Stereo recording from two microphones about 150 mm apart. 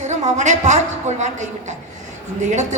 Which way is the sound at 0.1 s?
50° right (ahead or behind).